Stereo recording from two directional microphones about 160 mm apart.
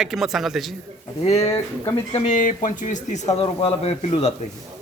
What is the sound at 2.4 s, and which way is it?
Speech, 55° left (ahead or behind).